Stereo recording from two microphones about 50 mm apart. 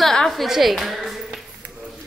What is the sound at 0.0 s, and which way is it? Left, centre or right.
Music, centre.